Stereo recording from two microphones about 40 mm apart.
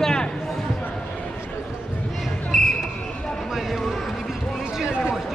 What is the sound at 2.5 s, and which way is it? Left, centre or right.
Basketball bounce, centre.